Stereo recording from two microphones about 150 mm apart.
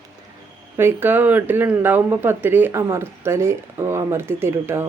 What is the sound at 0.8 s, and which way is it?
A woman's voice, 15° right (ahead or behind).